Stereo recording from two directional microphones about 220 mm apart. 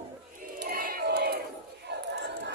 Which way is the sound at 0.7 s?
45° right (ahead or behind).